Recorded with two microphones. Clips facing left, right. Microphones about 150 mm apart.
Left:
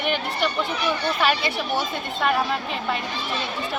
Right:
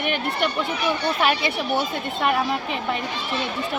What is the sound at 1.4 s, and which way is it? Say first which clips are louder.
Speech: right 2 dB; 25° right (ahead or behind).